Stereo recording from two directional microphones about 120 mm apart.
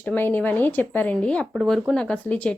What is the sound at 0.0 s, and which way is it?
A woman's voice, 15° left (ahead or behind).